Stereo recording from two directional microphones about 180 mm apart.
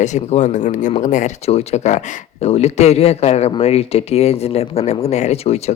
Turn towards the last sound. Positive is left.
turn(degrees=35)  # may be behind; listen again after turning